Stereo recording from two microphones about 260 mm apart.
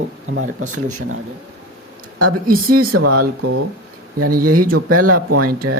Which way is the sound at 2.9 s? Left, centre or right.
Right.